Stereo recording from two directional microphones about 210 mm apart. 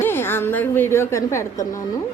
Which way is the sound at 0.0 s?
10° left (ahead or behind).